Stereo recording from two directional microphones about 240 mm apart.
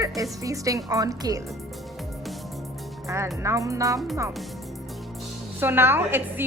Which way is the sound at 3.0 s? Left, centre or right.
Centre.